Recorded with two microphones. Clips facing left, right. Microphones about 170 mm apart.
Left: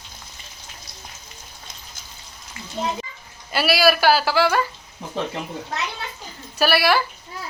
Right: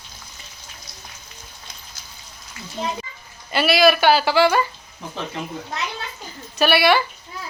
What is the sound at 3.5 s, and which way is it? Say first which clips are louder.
A woman's voice: right 2 dB; 5° left (ahead or behind).